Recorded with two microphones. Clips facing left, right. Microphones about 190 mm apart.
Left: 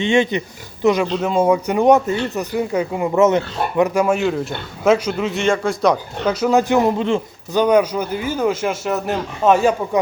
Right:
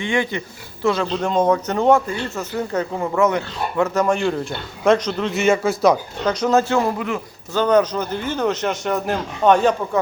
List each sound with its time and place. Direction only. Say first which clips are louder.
0.0 s speech: left 5 dB; 25° left (ahead or behind)
1.2 s a man's voice: even; 10° left (ahead or behind)
3.2 s a man's voice: left 4 dB; 20° left (ahead or behind); by 5.4 s 5° left (ahead or behind)
5.4 s speech: right 2 dB; 5° right (ahead or behind)
6.2 s a man's voice: left 2 dB; 10° left (ahead or behind)
7.5 s a man's voice: left 2 dB; 15° left (ahead or behind)